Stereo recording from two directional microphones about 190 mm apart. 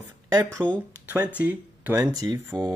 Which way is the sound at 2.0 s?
20° right (ahead or behind).